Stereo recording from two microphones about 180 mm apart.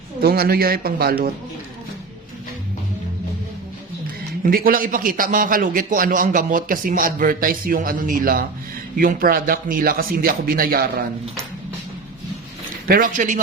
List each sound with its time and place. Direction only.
0.2 s a man's voice: 55° right (ahead or behind)
4.4 s a man's voice: 55° right (ahead or behind)
12.9 s a man's voice: 50° right (ahead or behind)